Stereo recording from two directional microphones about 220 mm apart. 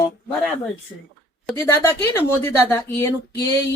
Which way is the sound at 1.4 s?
10° left (ahead or behind).